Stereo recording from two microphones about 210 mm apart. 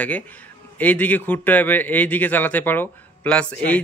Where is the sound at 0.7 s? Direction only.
10° left (ahead or behind).